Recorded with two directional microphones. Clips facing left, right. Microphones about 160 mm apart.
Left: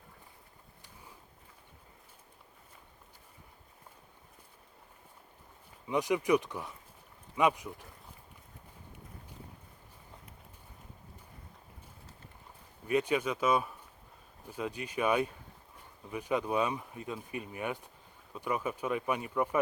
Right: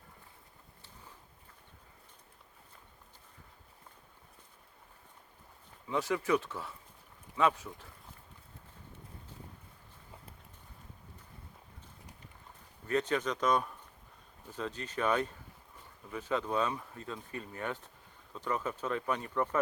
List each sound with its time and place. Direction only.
5.9 s speech: 15° left (ahead or behind)
12.9 s speech: 10° left (ahead or behind)